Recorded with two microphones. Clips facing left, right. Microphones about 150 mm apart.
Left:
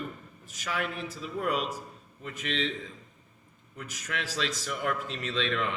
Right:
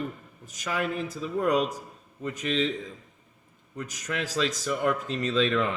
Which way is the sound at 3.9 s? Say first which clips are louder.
Right 3 dB; 45° right (ahead or behind).